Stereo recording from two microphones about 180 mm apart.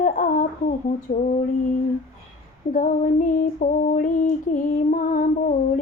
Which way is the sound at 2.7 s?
45° left (ahead or behind).